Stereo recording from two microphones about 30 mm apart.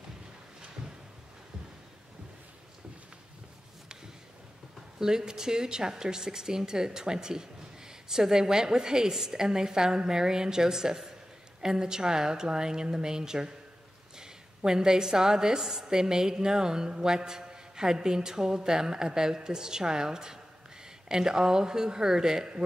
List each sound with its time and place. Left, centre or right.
4.9 s a woman's voice: centre